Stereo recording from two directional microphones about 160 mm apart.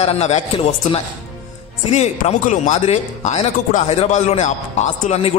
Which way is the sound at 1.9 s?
45° left (ahead or behind).